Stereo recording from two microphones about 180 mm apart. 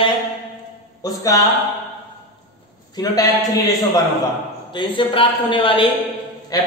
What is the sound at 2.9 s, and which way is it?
Speech, 20° left (ahead or behind).